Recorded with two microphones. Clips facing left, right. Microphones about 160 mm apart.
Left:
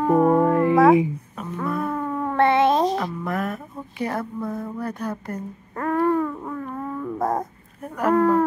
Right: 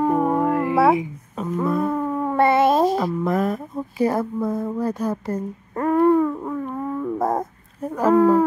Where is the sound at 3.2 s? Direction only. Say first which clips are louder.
Right 5 dB; 35° right (ahead or behind).